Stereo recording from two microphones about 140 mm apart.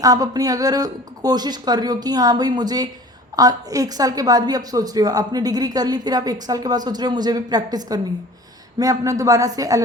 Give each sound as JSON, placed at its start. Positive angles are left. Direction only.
{"t": 0.0, "sound": "a woman's voice", "side_deg": -25}